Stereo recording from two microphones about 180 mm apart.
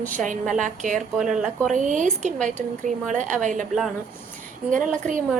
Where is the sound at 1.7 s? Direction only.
45° right (ahead or behind).